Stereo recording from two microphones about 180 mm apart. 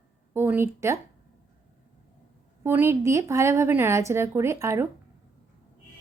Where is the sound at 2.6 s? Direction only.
15° right (ahead or behind).